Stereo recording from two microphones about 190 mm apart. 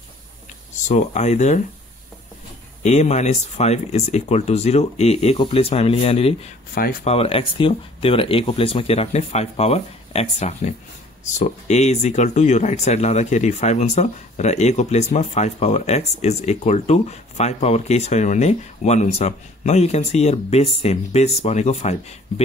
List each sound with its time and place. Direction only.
0.8 s speech: 40° left (ahead or behind)
2.8 s speech: 35° left (ahead or behind)
6.7 s speech: 50° left (ahead or behind)
7.1 s speech: 30° left (ahead or behind)